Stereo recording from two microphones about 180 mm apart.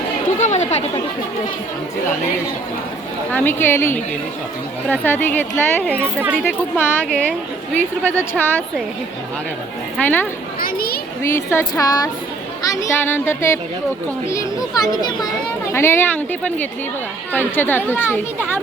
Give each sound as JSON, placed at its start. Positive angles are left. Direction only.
{"t": 0.3, "sound": "chatter", "side_deg": 40}
{"t": 3.3, "sound": "speech", "side_deg": 10}
{"t": 10.0, "sound": "speech", "side_deg": 10}
{"t": 10.6, "sound": "children playing", "side_deg": 60}
{"t": 11.2, "sound": "speech", "side_deg": 15}